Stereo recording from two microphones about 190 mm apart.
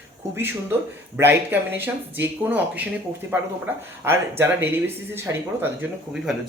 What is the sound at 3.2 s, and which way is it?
Speech, 10° right (ahead or behind).